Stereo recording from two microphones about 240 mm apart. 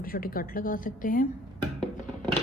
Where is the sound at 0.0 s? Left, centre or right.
Left.